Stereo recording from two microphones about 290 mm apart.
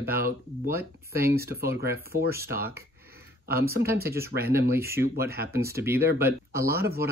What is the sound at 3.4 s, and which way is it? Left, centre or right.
Speech, right.